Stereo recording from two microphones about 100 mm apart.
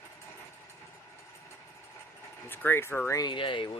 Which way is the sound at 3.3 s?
55° left (ahead or behind).